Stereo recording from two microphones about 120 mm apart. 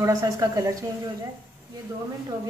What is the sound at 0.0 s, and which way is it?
Speech, 25° right (ahead or behind).